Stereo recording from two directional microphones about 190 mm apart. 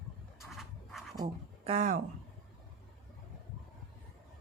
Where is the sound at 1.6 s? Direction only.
35° right (ahead or behind).